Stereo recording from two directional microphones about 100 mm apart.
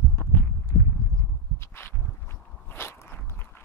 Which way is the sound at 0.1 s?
15° left (ahead or behind).